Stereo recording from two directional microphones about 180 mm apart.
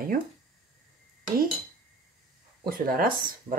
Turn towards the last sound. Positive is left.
turn(degrees=-55)  # may be behind; listen again after turning